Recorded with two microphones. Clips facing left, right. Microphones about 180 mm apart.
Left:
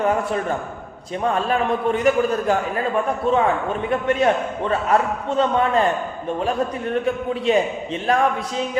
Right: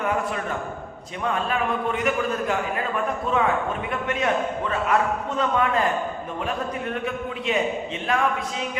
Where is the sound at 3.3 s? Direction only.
30° left (ahead or behind).